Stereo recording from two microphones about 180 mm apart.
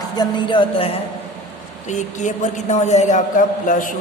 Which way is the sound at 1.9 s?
45° left (ahead or behind).